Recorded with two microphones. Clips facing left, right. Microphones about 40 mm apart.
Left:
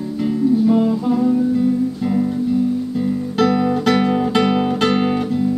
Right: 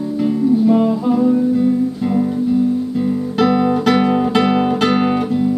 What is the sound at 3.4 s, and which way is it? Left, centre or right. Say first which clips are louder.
Music: right 2 dB; centre.